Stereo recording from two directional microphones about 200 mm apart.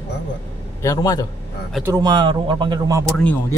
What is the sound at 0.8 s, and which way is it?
Speech, 15° left (ahead or behind).